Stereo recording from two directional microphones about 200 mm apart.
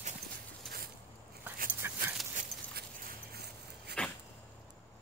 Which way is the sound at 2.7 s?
50° right (ahead or behind).